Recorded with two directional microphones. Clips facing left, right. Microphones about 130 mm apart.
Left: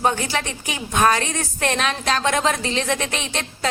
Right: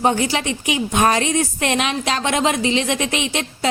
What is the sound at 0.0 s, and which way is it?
A woman's voice, 20° right (ahead or behind).